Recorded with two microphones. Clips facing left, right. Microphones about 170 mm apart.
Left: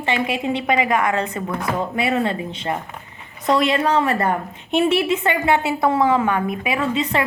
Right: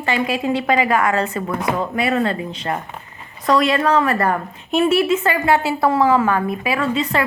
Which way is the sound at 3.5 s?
25° left (ahead or behind).